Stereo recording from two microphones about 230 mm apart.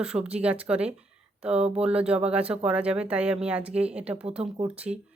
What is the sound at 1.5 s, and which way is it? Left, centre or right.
Speech, right.